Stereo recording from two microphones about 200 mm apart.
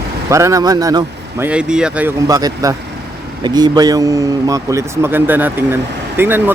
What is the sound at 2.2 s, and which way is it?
Speech, 15° right (ahead or behind).